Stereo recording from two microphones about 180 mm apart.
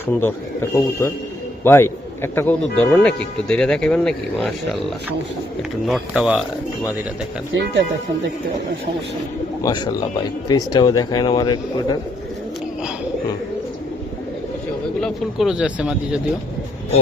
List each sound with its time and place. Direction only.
0.2 s a man's voice: 15° left (ahead or behind)
5.8 s speech: centre (ahead or behind)
9.6 s speech: 25° left (ahead or behind)
15.0 s speech: centre (ahead or behind)